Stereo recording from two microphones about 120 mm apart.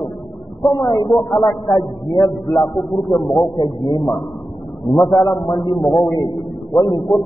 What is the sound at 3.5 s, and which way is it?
Speech, 45° left (ahead or behind).